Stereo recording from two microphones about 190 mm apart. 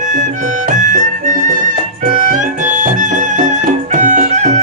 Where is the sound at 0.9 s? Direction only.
40° right (ahead or behind).